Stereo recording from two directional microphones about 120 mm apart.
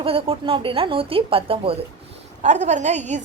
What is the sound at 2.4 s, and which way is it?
Speech, 80° right.